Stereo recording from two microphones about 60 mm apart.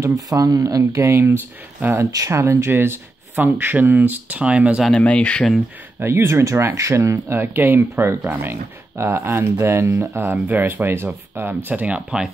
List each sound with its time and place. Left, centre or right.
0.0 s speech: right
1.1 s speech: right
2.1 s speech: right
4.9 s speech: left
5.9 s speech: right
7.3 s speech: right
8.9 s speech: right
10.3 s speech: right